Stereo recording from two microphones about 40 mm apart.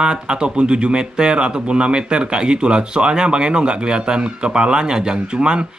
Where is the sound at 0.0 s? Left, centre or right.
Right.